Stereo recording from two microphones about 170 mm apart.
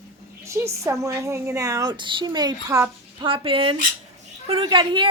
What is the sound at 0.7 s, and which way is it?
A woman's voice, 15° right (ahead or behind).